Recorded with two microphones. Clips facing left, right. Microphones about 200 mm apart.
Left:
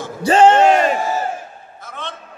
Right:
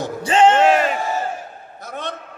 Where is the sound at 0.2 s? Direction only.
40° left (ahead or behind).